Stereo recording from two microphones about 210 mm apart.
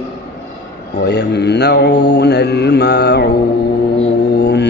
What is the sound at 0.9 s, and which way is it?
Mantra, 55° left (ahead or behind).